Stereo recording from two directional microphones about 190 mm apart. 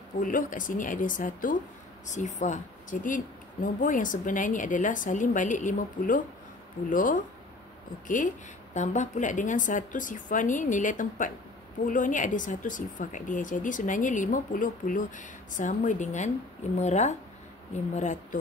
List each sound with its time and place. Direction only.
0.2 s speech: 45° left (ahead or behind)
8.7 s speech: 40° left (ahead or behind)